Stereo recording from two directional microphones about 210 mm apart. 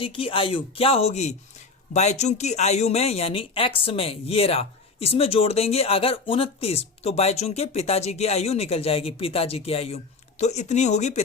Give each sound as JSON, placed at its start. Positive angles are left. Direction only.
{"t": 0.0, "sound": "speech", "side_deg": 25}